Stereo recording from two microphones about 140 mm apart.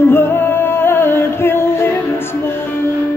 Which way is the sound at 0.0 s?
15° left (ahead or behind).